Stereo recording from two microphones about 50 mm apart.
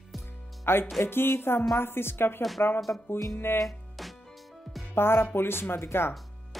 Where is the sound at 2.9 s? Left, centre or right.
Left.